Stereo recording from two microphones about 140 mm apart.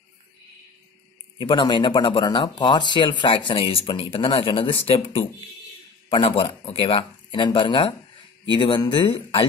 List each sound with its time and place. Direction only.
1.4 s speech: 35° left (ahead or behind)